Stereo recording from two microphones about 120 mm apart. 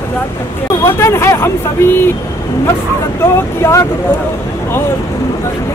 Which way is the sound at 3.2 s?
20° left (ahead or behind).